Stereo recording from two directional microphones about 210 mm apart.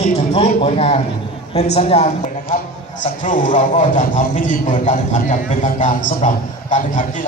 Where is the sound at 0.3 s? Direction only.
30° left (ahead or behind).